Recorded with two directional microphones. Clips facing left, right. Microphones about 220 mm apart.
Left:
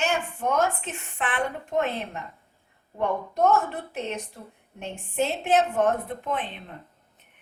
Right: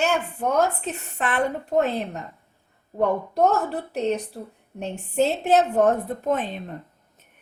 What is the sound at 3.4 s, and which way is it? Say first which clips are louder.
A woman's voice: even; 35° right (ahead or behind).